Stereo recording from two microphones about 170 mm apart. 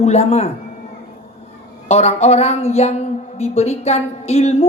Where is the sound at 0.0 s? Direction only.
40° left (ahead or behind).